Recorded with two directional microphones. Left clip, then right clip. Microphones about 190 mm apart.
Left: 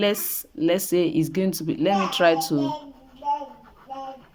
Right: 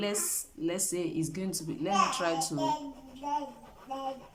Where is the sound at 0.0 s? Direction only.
40° left (ahead or behind).